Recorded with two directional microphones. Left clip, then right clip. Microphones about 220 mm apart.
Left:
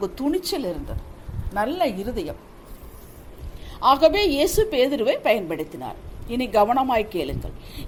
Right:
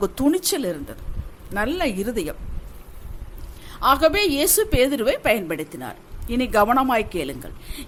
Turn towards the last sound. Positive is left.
turn(degrees=-20)  # may be behind; listen again after turning